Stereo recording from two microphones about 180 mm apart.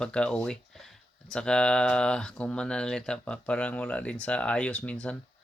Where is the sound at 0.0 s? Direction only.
5° left (ahead or behind).